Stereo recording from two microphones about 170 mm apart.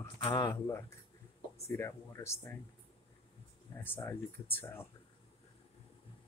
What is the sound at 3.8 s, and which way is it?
Speech, 10° left (ahead or behind).